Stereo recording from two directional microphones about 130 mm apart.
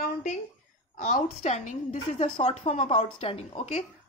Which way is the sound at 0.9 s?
75° left (ahead or behind).